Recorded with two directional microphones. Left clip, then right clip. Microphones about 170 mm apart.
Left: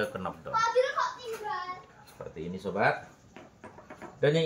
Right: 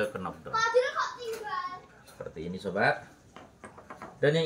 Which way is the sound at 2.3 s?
Centre (ahead or behind).